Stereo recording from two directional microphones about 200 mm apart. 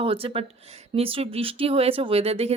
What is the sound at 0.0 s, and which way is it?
A woman's voice, 25° right (ahead or behind).